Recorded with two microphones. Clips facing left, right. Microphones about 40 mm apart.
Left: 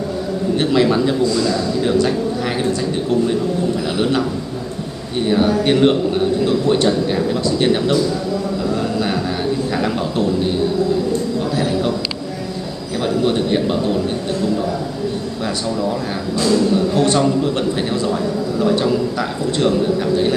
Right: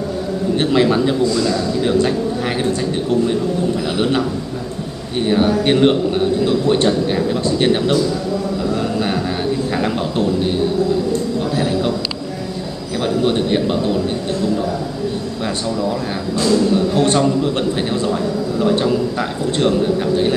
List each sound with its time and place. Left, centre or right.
0.6 s a man's voice: centre
5.2 s a man's voice: centre
8.6 s a sound: centre
9.8 s a man's voice: centre
11.5 s a sound: centre
13.0 s a man's voice: centre
16.3 s speech: centre
16.7 s a man's voice: centre